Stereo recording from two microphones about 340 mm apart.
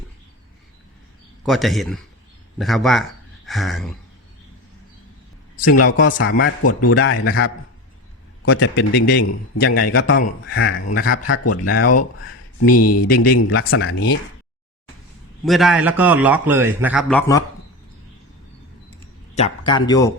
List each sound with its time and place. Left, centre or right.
1.5 s a man's voice: centre
6.0 s a man's voice: left
13.1 s speech: left
13.5 s a man's voice: left
15.4 s a man's voice: centre
19.3 s speech: centre